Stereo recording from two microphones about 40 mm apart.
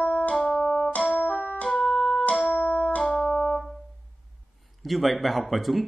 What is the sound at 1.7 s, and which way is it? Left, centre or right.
Music, left.